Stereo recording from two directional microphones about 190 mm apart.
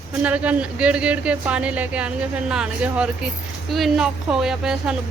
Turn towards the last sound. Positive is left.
turn(degrees=-5)  # may be behind; listen again after turning